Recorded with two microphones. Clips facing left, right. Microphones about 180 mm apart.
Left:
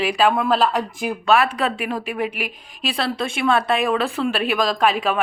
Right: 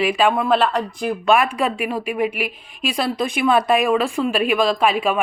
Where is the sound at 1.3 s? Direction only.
15° right (ahead or behind).